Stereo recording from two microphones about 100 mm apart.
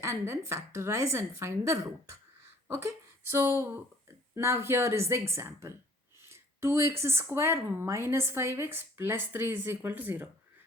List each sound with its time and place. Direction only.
0.0 s speech: 30° right (ahead or behind)
2.4 s a sound: 25° right (ahead or behind)
3.6 s speech: 25° right (ahead or behind)